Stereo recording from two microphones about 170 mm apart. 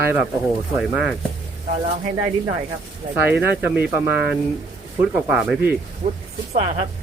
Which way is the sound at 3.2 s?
10° right (ahead or behind).